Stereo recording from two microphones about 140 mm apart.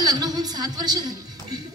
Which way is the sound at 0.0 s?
30° right (ahead or behind).